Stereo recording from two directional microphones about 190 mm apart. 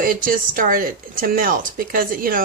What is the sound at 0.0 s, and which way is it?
Speech, 45° right (ahead or behind).